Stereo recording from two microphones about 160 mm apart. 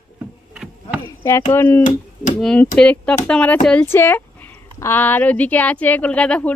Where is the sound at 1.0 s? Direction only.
20° left (ahead or behind).